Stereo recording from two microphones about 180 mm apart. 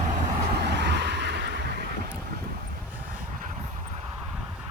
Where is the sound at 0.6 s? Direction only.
70° right (ahead or behind).